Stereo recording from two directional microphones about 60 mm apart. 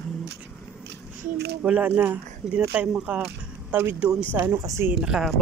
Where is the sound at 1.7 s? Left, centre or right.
Centre.